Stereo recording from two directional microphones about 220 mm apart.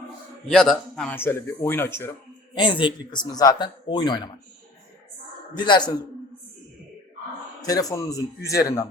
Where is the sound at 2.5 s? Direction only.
20° left (ahead or behind).